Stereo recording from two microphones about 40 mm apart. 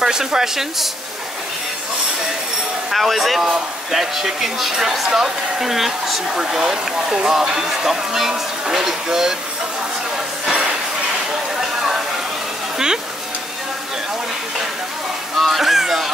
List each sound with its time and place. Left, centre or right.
0.0 s speech: centre
2.9 s speech: centre
3.4 s speech: centre
6.2 s speech: centre
10.1 s a sound: centre
15.3 s music: centre